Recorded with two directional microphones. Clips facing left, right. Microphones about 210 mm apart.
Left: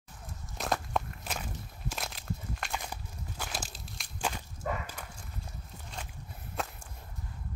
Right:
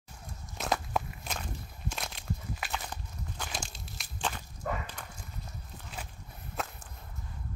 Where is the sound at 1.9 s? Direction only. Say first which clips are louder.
Even; centre (ahead or behind).